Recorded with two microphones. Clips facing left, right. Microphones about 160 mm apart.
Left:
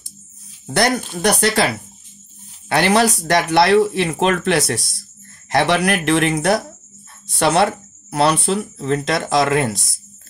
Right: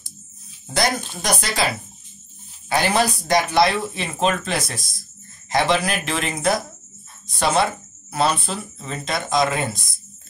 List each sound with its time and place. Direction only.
0.7 s speech: 65° left (ahead or behind)
2.7 s speech: 75° left (ahead or behind)